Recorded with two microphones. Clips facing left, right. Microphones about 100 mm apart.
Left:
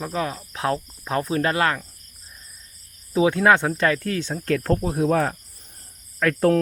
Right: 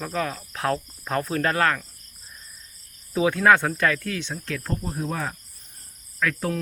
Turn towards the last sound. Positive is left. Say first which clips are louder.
# left 7 dB
turn(degrees=55)  # may be behind; listen again after turning